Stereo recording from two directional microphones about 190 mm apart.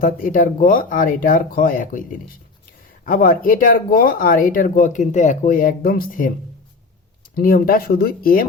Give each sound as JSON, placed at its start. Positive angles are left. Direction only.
{"t": 0.0, "sound": "speech", "side_deg": 45}
{"t": 7.3, "sound": "speech", "side_deg": 50}